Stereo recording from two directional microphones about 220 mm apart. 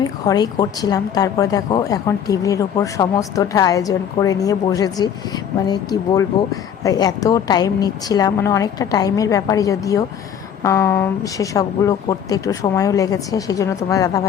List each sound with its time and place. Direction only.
0.0 s speech: 15° left (ahead or behind)